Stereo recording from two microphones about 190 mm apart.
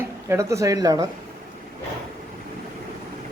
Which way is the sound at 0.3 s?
15° right (ahead or behind).